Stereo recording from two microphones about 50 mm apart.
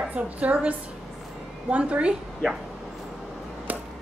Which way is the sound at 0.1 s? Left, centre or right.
Right.